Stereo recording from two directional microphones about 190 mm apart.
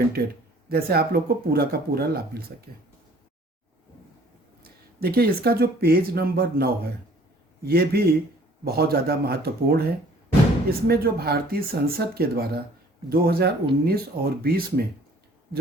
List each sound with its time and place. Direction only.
0.7 s speech: 55° right (ahead or behind)
4.6 s speech: 55° right (ahead or behind)